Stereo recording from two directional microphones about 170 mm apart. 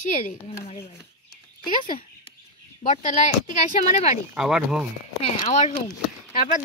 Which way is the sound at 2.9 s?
45° left (ahead or behind).